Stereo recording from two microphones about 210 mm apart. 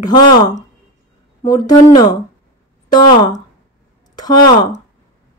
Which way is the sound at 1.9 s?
20° left (ahead or behind).